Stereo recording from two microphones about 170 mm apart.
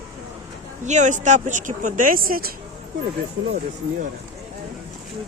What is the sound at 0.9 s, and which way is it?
Speech, 45° right (ahead or behind).